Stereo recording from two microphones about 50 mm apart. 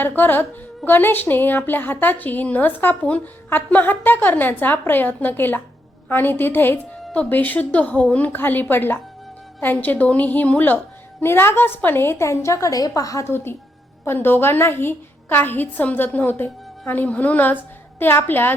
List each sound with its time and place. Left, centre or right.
0.2 s a woman's voice: left
11.2 s a woman's voice: left
12.3 s a woman's voice: left
13.3 s a woman's voice: left
18.0 s a woman's voice: left